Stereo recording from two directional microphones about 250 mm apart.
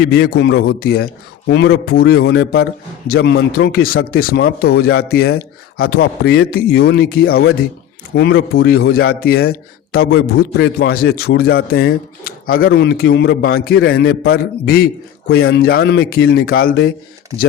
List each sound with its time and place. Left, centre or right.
0.0 s speech: left